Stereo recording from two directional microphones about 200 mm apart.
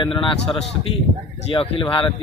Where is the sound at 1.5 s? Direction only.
25° left (ahead or behind).